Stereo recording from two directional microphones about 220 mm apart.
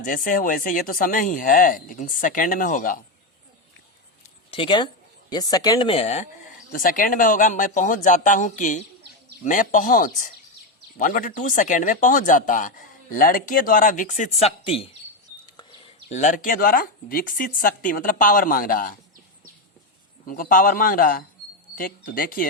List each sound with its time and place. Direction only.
0.0 s speech: 35° left (ahead or behind)
4.2 s a sound: 25° left (ahead or behind)
5.3 s speech: 15° left (ahead or behind)
6.7 s speech: 40° left (ahead or behind)
16.0 s speech: 35° left (ahead or behind)
20.2 s speech: 40° left (ahead or behind)